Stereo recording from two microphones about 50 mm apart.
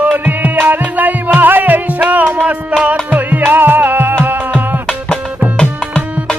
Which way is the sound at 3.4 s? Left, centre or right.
Right.